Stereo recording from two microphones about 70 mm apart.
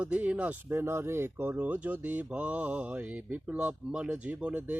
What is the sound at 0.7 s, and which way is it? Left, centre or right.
Speech, right.